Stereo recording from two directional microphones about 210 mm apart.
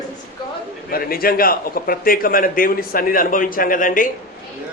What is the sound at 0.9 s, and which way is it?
A man's voice, 45° left (ahead or behind).